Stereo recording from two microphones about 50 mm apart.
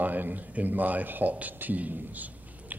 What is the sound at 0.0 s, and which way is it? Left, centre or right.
Speech, right.